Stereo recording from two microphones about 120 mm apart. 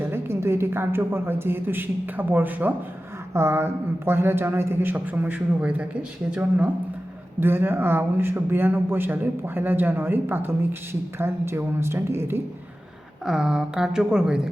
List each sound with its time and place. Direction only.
0.0 s a woman's voice: 20° right (ahead or behind)
13.2 s a woman's voice: 5° right (ahead or behind)